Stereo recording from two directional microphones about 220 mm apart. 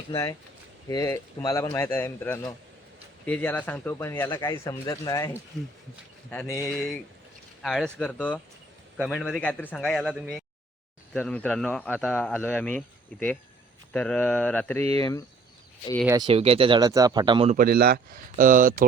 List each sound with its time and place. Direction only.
0.1 s speech: 15° left (ahead or behind)
6.7 s speech: centre (ahead or behind); by 15.2 s 15° left (ahead or behind)
16.0 s speech: 20° right (ahead or behind)
17.6 s speech: 45° right (ahead or behind)